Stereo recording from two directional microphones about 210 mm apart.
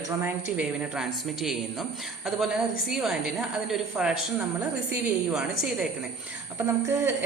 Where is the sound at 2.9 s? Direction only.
Centre (ahead or behind).